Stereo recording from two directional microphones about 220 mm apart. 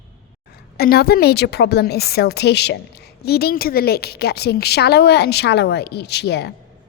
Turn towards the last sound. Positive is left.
turn(degrees=50)  # may be behind; listen again after turning